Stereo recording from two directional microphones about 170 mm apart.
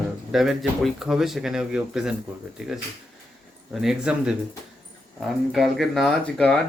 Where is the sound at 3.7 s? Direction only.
Centre (ahead or behind).